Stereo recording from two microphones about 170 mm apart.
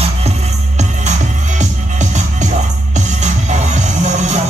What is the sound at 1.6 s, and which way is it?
Music, 45° right (ahead or behind).